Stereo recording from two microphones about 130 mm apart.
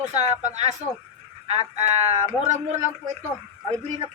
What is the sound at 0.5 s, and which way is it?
Speech, 60° right (ahead or behind).